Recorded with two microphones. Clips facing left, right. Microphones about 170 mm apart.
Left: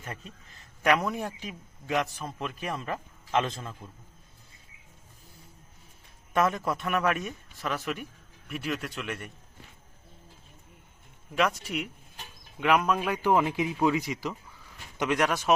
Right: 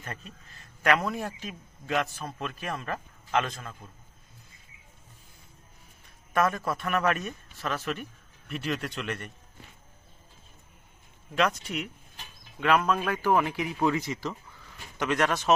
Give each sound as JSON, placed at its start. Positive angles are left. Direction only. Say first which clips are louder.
{"t": 0.0, "sound": "a man's voice", "louder": "even", "side_deg": 15}
{"t": 6.3, "sound": "a man's voice", "louder": "even", "side_deg": 20}
{"t": 11.3, "sound": "a man's voice", "louder": "even", "side_deg": 10}